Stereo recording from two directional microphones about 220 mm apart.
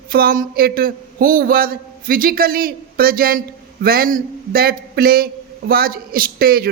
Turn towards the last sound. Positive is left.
turn(degrees=-40)  # may be behind; listen again after turning